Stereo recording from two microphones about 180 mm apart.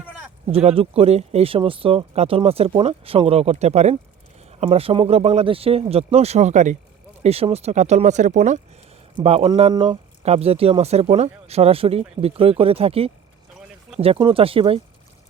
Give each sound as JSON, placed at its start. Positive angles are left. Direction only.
{"t": 0.5, "sound": "speech", "side_deg": -30}